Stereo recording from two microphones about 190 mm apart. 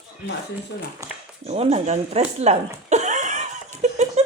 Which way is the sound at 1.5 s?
35° right (ahead or behind).